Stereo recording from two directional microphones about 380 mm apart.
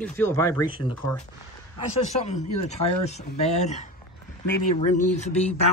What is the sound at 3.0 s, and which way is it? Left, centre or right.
Speech, centre.